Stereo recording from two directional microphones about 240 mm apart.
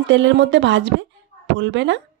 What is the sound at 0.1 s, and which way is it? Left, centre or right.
Speech, right.